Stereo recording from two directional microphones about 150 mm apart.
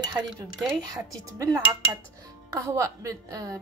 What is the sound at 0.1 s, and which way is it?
Cutlery, centre (ahead or behind).